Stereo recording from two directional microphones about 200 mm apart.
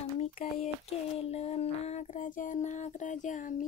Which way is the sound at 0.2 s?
30° left (ahead or behind).